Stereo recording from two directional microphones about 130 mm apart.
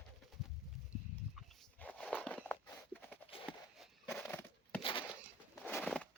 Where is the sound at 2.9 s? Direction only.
10° left (ahead or behind).